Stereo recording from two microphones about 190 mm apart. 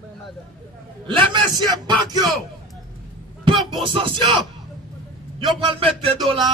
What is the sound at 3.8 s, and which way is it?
Music, 25° right (ahead or behind).